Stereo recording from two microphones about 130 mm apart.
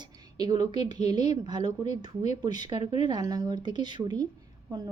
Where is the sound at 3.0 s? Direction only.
30° right (ahead or behind).